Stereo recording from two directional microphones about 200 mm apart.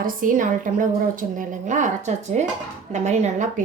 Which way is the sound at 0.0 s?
40° right (ahead or behind).